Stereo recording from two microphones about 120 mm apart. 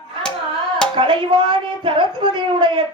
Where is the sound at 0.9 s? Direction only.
45° right (ahead or behind).